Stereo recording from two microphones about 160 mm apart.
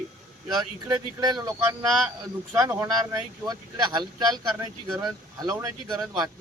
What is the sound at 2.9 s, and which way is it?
Speech, 25° right (ahead or behind).